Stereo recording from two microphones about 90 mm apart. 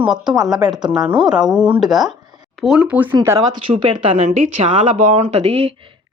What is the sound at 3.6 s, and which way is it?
Speech, 70° right (ahead or behind).